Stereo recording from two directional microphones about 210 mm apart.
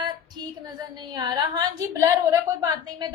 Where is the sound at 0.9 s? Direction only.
20° right (ahead or behind).